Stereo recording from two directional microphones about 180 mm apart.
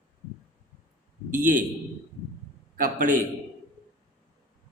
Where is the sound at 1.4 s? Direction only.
50° right (ahead or behind).